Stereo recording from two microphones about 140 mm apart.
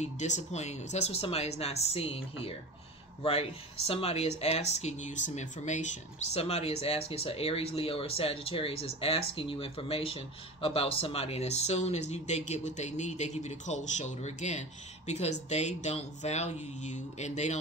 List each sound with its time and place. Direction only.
0.0 s speech: 55° left (ahead or behind)
6.4 s speech: 45° left (ahead or behind)